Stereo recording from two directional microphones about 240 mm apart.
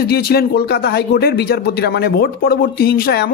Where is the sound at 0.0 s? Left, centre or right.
Left.